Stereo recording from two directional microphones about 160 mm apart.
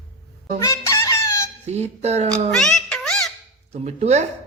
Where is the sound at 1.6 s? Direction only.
45° right (ahead or behind).